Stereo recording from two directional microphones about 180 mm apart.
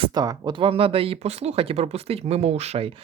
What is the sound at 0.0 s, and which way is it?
Speech, 20° right (ahead or behind).